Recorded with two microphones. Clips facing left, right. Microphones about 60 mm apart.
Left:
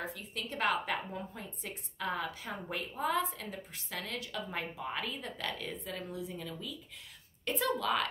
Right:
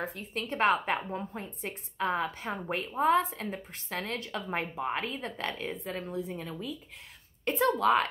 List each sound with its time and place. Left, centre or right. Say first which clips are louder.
0.2 s a woman's voice: right 7 dB; right